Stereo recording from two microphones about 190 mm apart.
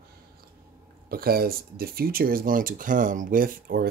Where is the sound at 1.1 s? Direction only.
50° right (ahead or behind).